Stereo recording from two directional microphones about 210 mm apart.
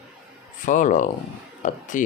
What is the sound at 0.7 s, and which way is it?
Speech, 40° left (ahead or behind).